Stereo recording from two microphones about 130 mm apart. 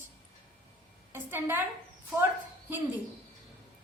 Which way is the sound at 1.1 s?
15° right (ahead or behind).